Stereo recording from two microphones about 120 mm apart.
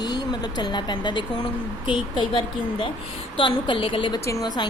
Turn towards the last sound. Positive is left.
turn(degrees=30)  # may be behind; listen again after turning